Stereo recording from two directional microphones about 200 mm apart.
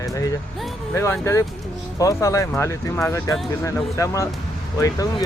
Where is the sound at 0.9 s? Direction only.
15° left (ahead or behind).